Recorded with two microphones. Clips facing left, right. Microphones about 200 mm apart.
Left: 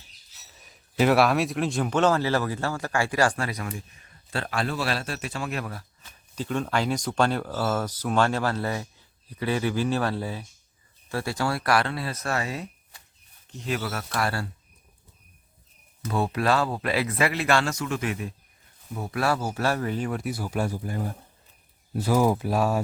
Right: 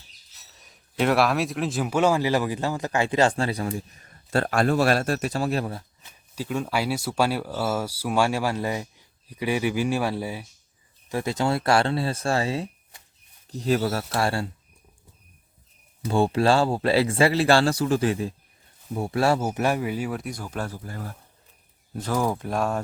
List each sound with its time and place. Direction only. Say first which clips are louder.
0.6 s a man's voice: left 2 dB; centre (ahead or behind); by 5.8 s 30° right (ahead or behind)
6.3 s a man's voice: even; 10° right (ahead or behind); by 14.5 s 25° right (ahead or behind)
16.0 s a man's voice: right 4 dB; 30° right (ahead or behind); by 21.2 s 20° left (ahead or behind)
21.9 s speech: left 3 dB; 10° left (ahead or behind)